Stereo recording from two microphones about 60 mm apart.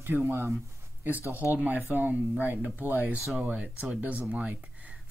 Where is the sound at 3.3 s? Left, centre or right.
Centre.